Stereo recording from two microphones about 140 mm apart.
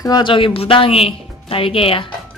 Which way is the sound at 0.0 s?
30° left (ahead or behind).